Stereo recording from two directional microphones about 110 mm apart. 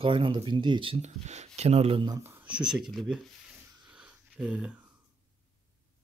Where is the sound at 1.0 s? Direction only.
90° right; by 2.0 s 70° right (ahead or behind).